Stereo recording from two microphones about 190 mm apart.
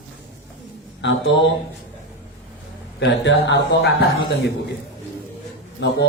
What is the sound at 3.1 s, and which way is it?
Speech, 70° left (ahead or behind).